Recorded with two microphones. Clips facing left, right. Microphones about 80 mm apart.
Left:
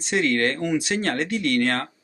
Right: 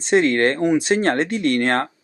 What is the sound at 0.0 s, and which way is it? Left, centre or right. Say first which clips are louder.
Speech: right 6 dB; right.